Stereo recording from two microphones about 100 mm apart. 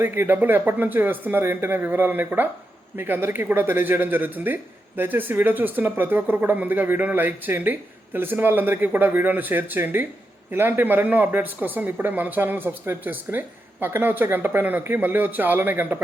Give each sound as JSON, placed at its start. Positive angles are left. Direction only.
{"t": 0.0, "sound": "speech", "side_deg": -20}